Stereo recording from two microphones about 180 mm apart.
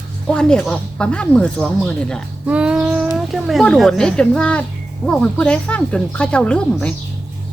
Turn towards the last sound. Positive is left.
turn(degrees=5)  # may be behind; listen again after turning